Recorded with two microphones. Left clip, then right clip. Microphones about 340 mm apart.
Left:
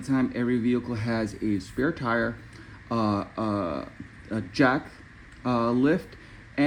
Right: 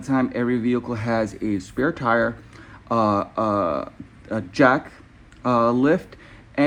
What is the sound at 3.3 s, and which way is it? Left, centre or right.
Speech, right.